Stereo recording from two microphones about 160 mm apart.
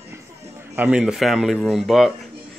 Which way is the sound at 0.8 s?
5° right (ahead or behind).